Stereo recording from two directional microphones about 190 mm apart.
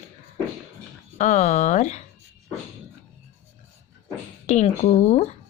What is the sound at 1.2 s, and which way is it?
Speech, 35° left (ahead or behind).